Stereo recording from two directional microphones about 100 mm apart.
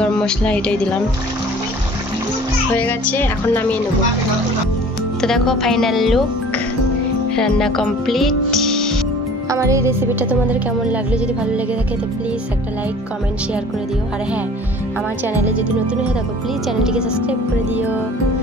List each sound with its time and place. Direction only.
0.0 s a woman's voice: 10° left (ahead or behind)
2.8 s speech: 20° left (ahead or behind)
5.2 s music: 5° left (ahead or behind)
7.3 s music: 5° left (ahead or behind)
9.5 s music: 30° right (ahead or behind)
10.5 s speech: 15° right (ahead or behind)
15.3 s speech: 15° right (ahead or behind)